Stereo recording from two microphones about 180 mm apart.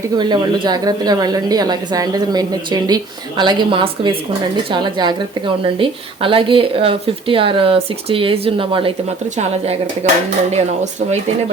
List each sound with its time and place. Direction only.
0.2 s a woman's voice: 25° right (ahead or behind)